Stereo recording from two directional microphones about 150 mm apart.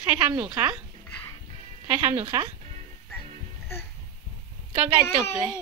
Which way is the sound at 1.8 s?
15° right (ahead or behind).